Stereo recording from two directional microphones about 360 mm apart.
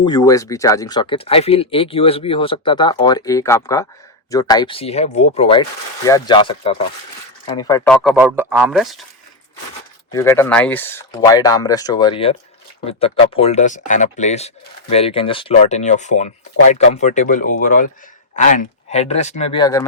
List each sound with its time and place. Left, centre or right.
0.0 s speech: centre
10.1 s speech: centre